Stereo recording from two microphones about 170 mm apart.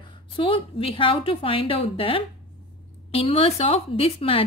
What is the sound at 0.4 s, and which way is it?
A woman's voice, 30° left (ahead or behind).